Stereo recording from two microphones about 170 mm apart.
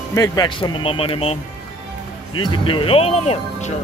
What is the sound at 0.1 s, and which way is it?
Music, 20° left (ahead or behind).